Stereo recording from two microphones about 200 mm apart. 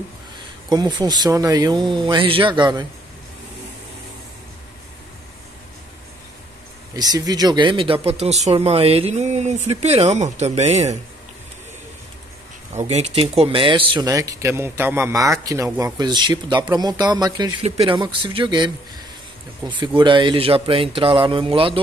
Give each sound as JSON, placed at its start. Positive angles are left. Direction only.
{"t": 0.7, "sound": "speech", "side_deg": -20}
{"t": 7.0, "sound": "speech", "side_deg": -20}
{"t": 12.7, "sound": "speech", "side_deg": -35}
{"t": 19.8, "sound": "speech", "side_deg": -25}